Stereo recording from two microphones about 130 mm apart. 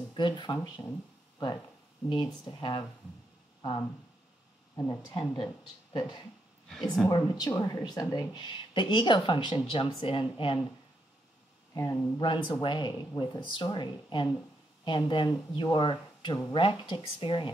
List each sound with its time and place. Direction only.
0.1 s speech: 35° left (ahead or behind)
4.7 s speech: 20° left (ahead or behind)
5.1 s speech: 30° left (ahead or behind)
11.7 s speech: 25° left (ahead or behind)
12.2 s speech: 35° left (ahead or behind)